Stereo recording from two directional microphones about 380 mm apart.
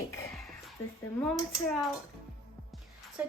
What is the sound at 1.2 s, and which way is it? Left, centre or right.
Speech, centre.